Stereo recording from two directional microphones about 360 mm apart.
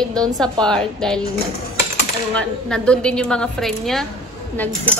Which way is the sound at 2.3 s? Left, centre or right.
Centre.